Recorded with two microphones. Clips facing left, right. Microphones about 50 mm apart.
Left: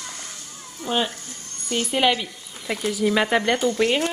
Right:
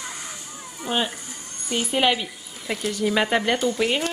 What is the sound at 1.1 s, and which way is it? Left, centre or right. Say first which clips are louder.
Speech: right 1 dB; centre.